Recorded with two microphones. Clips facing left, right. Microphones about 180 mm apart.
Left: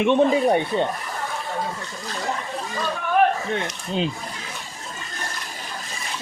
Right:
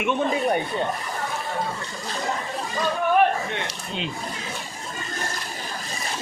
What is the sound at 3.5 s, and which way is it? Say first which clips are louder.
Speech: left 5 dB; 35° left (ahead or behind).